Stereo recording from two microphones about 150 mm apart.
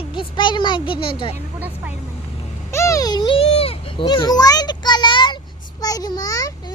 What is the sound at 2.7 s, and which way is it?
Children playing, 20° left (ahead or behind).